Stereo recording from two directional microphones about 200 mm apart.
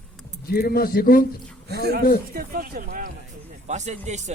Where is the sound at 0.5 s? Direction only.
50° left (ahead or behind).